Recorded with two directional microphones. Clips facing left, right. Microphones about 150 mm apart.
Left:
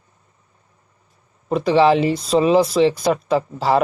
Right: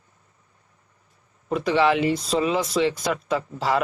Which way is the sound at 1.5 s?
30° left (ahead or behind).